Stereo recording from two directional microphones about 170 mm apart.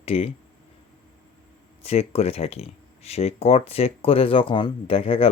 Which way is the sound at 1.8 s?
35° left (ahead or behind).